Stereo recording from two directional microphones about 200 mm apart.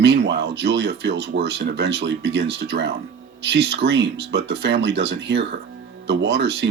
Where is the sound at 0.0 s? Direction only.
55° right (ahead or behind).